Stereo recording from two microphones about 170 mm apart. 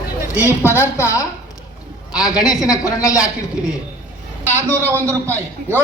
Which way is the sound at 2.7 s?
20° left (ahead or behind).